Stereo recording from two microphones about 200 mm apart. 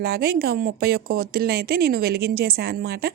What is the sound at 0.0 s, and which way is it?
Speech, 50° right (ahead or behind).